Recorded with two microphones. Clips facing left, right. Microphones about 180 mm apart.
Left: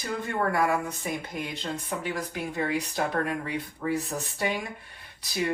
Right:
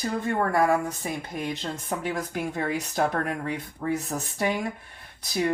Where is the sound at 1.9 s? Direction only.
45° right (ahead or behind).